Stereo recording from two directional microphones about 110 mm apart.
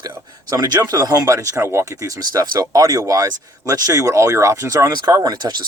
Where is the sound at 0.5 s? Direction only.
35° right (ahead or behind).